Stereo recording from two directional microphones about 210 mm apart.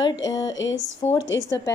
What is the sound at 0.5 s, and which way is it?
Speech, 65° left (ahead or behind).